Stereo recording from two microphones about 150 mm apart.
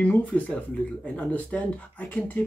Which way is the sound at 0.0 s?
10° left (ahead or behind).